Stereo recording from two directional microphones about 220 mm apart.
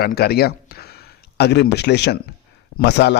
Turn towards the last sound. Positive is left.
turn(degrees=50)  # may be behind; listen again after turning